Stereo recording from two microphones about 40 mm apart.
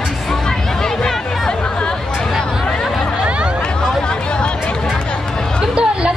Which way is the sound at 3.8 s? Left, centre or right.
Centre.